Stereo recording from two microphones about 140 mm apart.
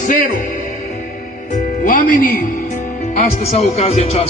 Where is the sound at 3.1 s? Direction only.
50° left (ahead or behind).